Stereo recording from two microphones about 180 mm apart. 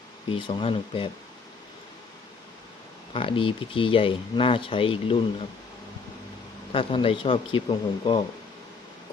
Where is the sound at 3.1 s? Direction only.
30° left (ahead or behind).